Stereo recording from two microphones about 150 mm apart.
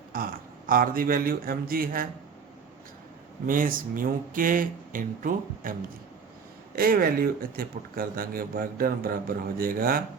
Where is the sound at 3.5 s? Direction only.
65° right (ahead or behind).